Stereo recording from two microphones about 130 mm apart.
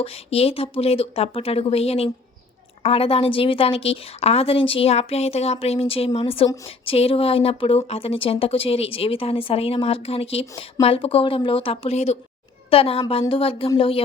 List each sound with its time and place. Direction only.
0.0 s speech: 50° left (ahead or behind)